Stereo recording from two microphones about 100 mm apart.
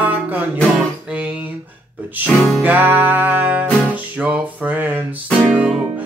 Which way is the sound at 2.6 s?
15° right (ahead or behind).